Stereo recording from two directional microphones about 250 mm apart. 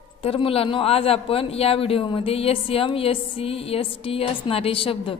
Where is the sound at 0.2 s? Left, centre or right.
Left.